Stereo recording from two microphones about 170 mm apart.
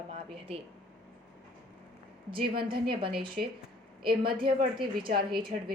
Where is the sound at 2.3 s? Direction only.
60° right (ahead or behind).